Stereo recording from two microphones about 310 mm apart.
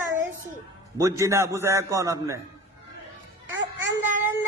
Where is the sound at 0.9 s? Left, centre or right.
Centre.